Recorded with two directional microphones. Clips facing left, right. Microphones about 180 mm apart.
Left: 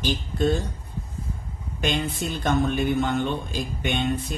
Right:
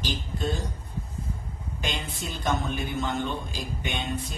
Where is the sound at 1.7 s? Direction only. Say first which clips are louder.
Left 8 dB; 60° left (ahead or behind).